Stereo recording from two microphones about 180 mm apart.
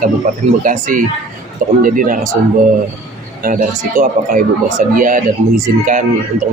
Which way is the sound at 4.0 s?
50° right (ahead or behind).